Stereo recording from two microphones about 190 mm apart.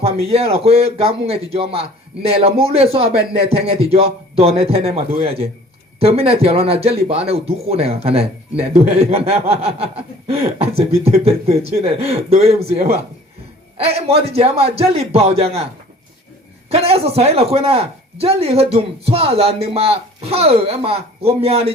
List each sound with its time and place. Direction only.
0.3 s speech: 30° right (ahead or behind)
16.6 s speech: 30° right (ahead or behind)